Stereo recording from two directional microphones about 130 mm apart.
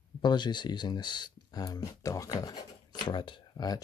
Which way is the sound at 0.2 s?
35° left (ahead or behind).